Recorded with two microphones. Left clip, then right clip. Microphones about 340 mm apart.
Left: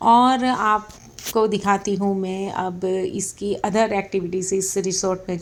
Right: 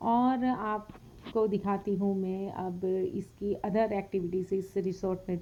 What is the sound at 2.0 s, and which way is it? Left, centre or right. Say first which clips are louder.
Speech: left 9 dB; right.